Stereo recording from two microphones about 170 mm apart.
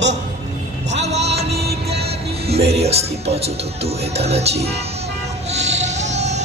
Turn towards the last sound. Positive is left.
turn(degrees=-40)  # may be behind; listen again after turning